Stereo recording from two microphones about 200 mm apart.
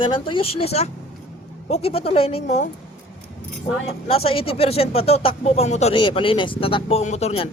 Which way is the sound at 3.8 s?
30° left (ahead or behind).